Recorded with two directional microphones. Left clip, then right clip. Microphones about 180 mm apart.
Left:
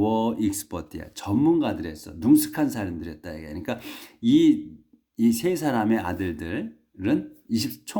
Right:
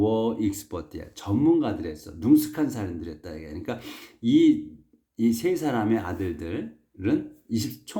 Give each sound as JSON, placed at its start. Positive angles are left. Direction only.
{"t": 0.0, "sound": "speech", "side_deg": 30}